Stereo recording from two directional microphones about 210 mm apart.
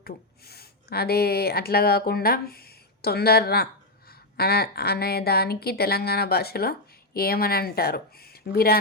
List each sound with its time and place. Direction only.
0.0 s speech: 50° left (ahead or behind)